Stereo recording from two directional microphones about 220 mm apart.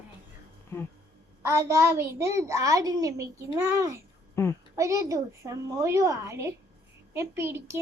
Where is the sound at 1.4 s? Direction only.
10° right (ahead or behind).